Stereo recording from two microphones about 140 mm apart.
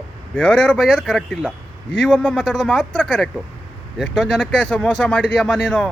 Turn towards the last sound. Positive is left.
turn(degrees=10)  # may be behind; listen again after turning